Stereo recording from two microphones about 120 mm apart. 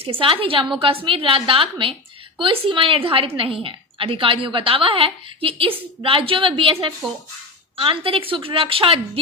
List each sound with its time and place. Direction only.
0.0 s a woman's voice: 50° right (ahead or behind)
7.8 s a woman's voice: 45° right (ahead or behind)